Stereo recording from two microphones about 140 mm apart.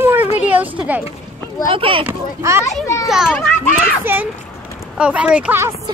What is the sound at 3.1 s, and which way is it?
Speech, 5° right (ahead or behind).